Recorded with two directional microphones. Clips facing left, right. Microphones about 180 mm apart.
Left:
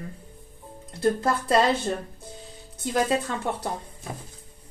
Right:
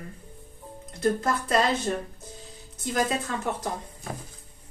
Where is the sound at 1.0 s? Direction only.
30° left (ahead or behind).